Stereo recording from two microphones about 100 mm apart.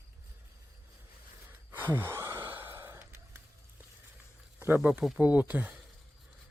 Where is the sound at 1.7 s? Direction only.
20° right (ahead or behind).